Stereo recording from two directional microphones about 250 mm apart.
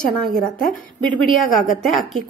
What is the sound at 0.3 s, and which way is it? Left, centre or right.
A woman's voice, centre.